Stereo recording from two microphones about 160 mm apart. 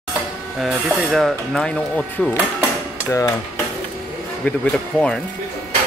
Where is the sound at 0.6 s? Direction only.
5° right (ahead or behind).